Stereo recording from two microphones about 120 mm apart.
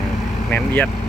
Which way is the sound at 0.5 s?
15° left (ahead or behind).